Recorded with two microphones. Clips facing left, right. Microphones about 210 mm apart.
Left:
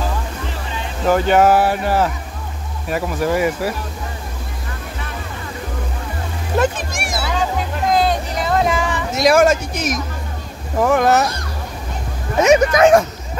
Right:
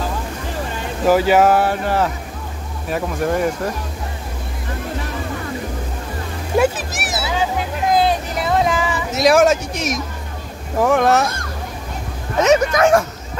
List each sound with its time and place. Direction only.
1.0 s speech: 5° right (ahead or behind)
6.6 s music: 5° right (ahead or behind)
10.8 s speech: centre (ahead or behind)
12.4 s speech: 15° left (ahead or behind)